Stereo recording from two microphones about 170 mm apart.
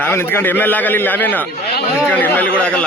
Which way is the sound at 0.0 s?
15° left (ahead or behind).